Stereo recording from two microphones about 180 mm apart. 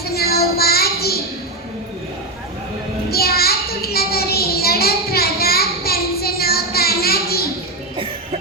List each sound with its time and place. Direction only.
0.0 s child singing: 60° left (ahead or behind)
3.1 s child singing: 60° left (ahead or behind)
7.9 s music: 30° right (ahead or behind)